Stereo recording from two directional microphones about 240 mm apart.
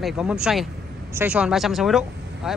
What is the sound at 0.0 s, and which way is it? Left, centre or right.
Speech, centre.